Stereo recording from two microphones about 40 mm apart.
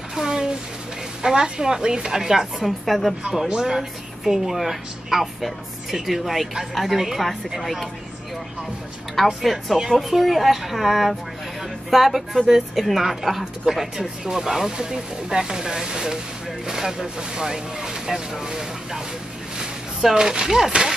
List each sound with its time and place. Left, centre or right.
0.1 s a sound: centre
1.2 s speech: centre
2.8 s speech: centre
3.3 s speech: centre
9.1 s speech: centre
19.6 s a sound: centre
20.4 s speech: centre